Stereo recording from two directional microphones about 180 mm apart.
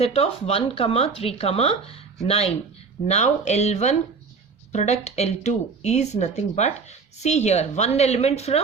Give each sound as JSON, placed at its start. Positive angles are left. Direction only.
{"t": 0.0, "sound": "speech", "side_deg": 35}